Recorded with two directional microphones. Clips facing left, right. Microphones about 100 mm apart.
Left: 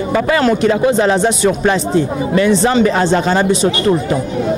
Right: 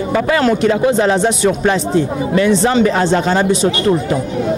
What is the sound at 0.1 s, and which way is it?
Speech, 20° left (ahead or behind).